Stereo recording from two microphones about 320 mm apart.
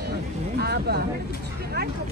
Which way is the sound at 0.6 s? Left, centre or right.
Right.